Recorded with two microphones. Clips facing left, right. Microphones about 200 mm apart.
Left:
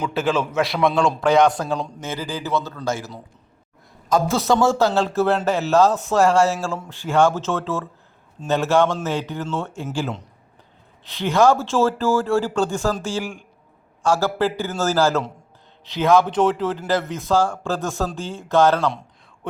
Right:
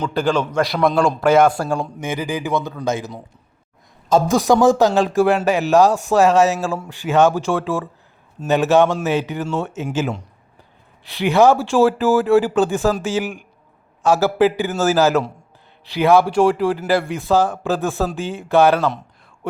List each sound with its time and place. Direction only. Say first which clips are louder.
0.0 s a man's voice: right 2 dB; 5° left (ahead or behind); by 3.2 s 20° right (ahead or behind)
4.3 s a man's voice: right 5 dB; 15° right (ahead or behind)
11.1 s a man's voice: right 3 dB; 15° right (ahead or behind)